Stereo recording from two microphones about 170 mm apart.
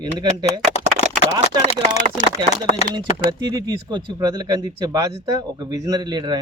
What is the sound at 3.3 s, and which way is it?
Speech, 25° right (ahead or behind).